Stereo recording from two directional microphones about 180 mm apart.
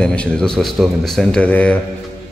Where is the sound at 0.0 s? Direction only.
5° left (ahead or behind).